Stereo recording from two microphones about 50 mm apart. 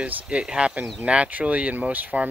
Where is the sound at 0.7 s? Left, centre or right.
Right.